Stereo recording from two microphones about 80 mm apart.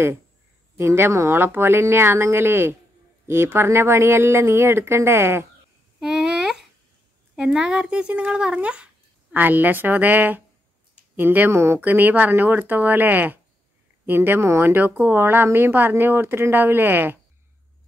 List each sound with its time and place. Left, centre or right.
0.7 s speech: right
5.9 s a sound: centre
7.3 s speech: centre